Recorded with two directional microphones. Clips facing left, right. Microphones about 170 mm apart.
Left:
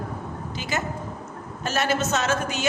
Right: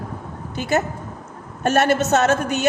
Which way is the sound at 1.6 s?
55° right (ahead or behind).